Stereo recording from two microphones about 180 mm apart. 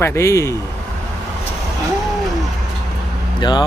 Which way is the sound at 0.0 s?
15° left (ahead or behind).